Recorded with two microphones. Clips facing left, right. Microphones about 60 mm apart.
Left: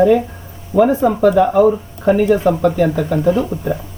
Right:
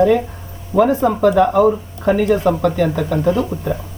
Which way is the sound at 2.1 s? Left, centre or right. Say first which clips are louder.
Left 1 dB; centre.